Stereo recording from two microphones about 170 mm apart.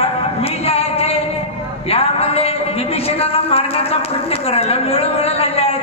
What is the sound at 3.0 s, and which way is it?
Speech, 35° left (ahead or behind).